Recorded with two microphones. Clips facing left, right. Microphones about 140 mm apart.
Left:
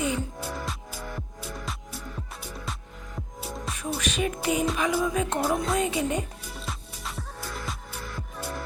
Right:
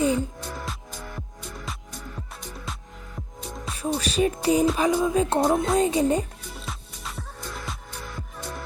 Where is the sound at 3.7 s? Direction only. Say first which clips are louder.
Right 6 dB; 35° right (ahead or behind).